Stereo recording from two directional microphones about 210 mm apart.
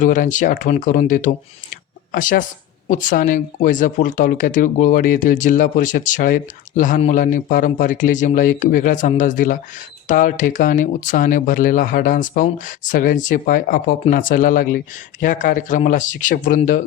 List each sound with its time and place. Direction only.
0.0 s speech: 40° left (ahead or behind)